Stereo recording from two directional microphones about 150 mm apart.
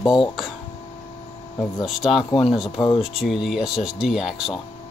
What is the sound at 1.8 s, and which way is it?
Speech, 5° right (ahead or behind).